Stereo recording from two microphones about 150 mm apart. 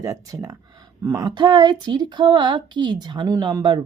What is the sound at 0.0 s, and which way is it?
Speech, 20° right (ahead or behind).